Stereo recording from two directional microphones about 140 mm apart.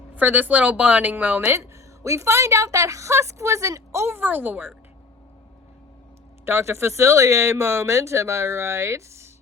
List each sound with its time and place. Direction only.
0.1 s a woman's voice: 10° right (ahead or behind)
1.5 s a woman's voice: 20° right (ahead or behind)
6.4 s a woman's voice: 20° right (ahead or behind)